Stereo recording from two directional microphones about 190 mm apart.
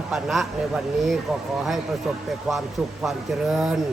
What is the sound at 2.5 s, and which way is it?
A man's voice, centre (ahead or behind).